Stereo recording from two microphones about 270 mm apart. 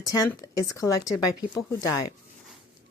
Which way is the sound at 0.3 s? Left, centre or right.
Centre.